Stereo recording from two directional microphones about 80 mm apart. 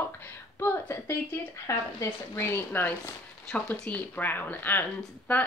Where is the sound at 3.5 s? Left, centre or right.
Centre.